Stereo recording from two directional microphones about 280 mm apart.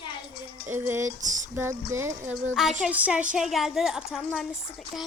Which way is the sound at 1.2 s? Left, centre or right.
Right.